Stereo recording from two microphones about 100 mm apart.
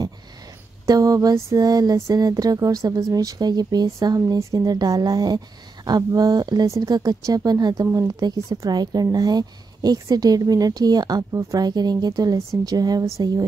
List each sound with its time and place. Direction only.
0.8 s a woman's voice: 35° right (ahead or behind)